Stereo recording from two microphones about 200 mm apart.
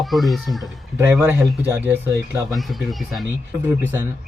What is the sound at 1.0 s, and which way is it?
Speech, 10° right (ahead or behind).